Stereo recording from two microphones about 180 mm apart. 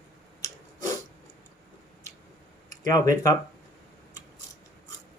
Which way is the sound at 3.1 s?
20° left (ahead or behind).